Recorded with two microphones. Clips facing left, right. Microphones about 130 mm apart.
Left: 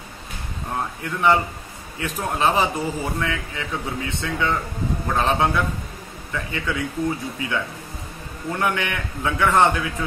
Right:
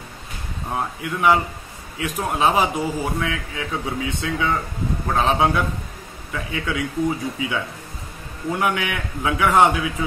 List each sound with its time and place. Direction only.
0.7 s a man's voice: 5° right (ahead or behind)
8.5 s a man's voice: 10° right (ahead or behind)